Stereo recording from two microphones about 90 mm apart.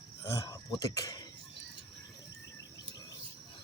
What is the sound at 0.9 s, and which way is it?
Speech, 40° left (ahead or behind).